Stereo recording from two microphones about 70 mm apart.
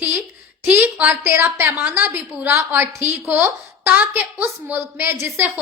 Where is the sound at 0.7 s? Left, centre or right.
Right.